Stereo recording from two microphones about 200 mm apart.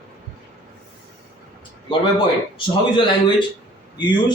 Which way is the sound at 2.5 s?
25° left (ahead or behind).